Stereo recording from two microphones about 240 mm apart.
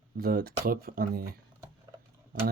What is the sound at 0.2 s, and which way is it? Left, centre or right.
Speech, right.